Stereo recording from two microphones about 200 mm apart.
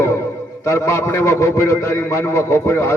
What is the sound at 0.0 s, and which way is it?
A man's voice, 15° left (ahead or behind).